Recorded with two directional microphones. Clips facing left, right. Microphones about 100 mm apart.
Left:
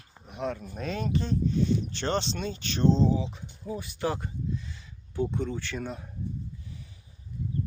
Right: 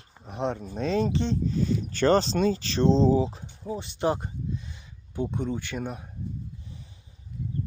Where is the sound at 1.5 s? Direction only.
40° right (ahead or behind); by 6.0 s 15° right (ahead or behind).